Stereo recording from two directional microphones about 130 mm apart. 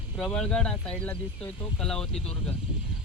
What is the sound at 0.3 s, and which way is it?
Speech, 5° left (ahead or behind).